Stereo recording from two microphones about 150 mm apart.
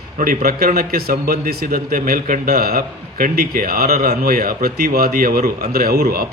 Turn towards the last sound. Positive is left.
turn(degrees=-85)